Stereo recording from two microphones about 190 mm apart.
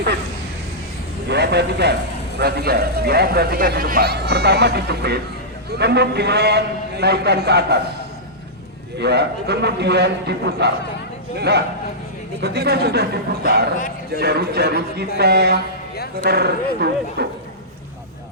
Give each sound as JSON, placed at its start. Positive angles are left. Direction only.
{"t": 1.3, "sound": "speech", "side_deg": -60}
{"t": 9.0, "sound": "speech", "side_deg": -60}